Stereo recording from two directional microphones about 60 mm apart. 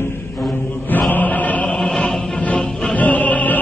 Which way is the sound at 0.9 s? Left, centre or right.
Left.